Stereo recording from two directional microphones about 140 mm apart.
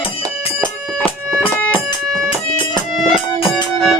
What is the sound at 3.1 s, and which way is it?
Music, 40° left (ahead or behind).